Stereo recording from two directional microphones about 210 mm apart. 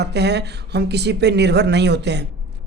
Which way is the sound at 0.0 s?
55° right (ahead or behind).